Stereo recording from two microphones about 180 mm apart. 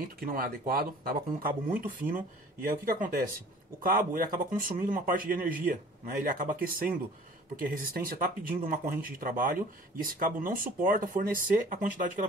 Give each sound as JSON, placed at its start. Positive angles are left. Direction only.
{"t": 0.2, "sound": "speech", "side_deg": -50}